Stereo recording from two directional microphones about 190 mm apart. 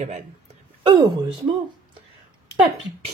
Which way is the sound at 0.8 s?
20° right (ahead or behind).